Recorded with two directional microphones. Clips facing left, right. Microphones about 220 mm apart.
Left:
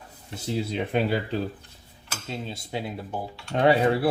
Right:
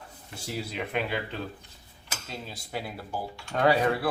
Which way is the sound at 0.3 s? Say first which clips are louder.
Left 7 dB; 25° left (ahead or behind).